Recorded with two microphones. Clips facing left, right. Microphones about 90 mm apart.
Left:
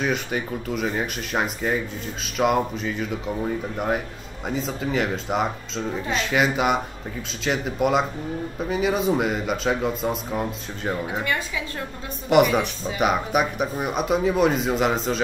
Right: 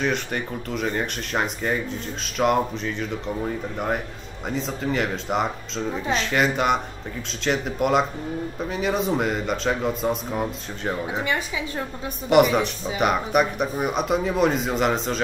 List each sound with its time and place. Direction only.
0.0 s speech: 5° left (ahead or behind)
11.2 s a woman's voice: 15° right (ahead or behind)
12.3 s speech: centre (ahead or behind)